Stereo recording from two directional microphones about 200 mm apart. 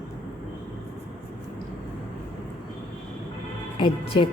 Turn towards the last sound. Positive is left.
turn(degrees=25)  # may be behind; listen again after turning